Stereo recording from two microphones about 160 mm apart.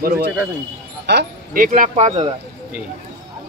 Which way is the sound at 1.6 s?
50° right (ahead or behind).